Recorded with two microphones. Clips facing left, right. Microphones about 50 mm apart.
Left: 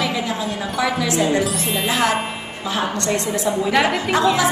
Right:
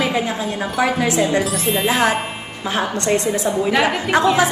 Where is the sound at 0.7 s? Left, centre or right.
Right.